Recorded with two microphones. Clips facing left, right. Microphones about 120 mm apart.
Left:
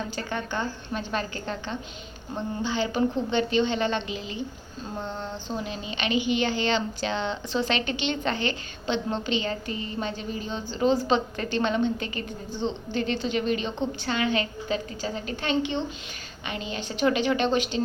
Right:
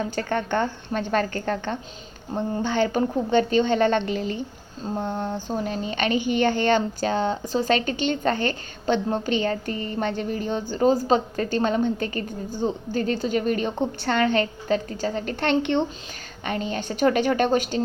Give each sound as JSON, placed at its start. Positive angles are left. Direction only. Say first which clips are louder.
{"t": 0.2, "sound": "a woman's voice", "louder": "right 7 dB", "side_deg": -55}
{"t": 16.5, "sound": "a woman's voice", "louder": "right 6 dB", "side_deg": -50}